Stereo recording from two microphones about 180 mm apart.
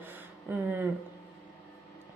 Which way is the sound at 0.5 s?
10° right (ahead or behind).